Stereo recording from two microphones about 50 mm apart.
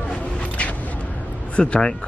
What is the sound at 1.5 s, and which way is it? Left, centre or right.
Speech, left.